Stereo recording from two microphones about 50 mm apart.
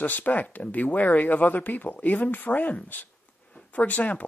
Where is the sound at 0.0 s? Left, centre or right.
Left.